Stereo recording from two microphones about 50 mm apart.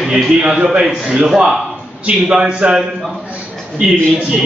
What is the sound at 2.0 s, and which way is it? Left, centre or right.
Speech, right.